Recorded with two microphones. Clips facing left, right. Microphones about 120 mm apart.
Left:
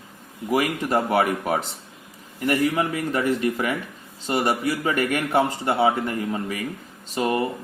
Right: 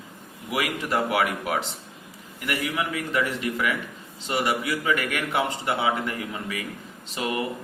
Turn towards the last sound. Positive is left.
turn(degrees=40)  # may be behind; listen again after turning